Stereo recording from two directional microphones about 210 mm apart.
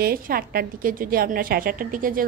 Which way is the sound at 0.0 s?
45° right (ahead or behind).